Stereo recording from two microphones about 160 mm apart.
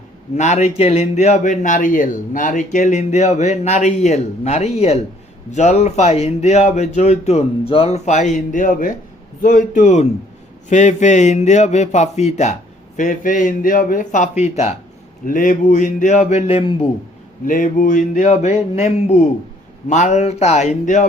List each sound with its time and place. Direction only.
0.3 s a man's voice: 45° left (ahead or behind)
15.3 s a man's voice: 55° left (ahead or behind); by 16.7 s 40° left (ahead or behind)
17.4 s a man's voice: 55° left (ahead or behind)